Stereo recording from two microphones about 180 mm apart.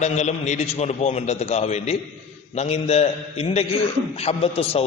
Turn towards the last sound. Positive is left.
turn(degrees=35)  # may be behind; listen again after turning